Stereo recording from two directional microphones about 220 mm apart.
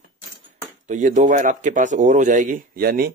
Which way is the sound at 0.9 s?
35° right (ahead or behind).